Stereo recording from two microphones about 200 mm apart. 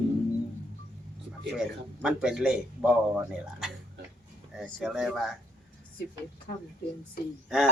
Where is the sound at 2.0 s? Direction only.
5° right (ahead or behind).